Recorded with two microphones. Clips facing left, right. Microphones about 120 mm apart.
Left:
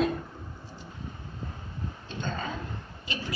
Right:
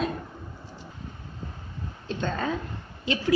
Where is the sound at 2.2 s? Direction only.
70° right (ahead or behind).